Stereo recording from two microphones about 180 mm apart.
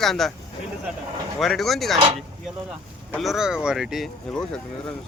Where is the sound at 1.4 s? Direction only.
Centre (ahead or behind).